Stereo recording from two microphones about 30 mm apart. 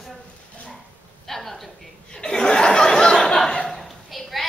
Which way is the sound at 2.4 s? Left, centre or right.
Left.